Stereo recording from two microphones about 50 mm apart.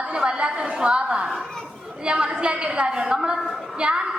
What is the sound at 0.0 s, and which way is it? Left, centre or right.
A woman's voice, centre.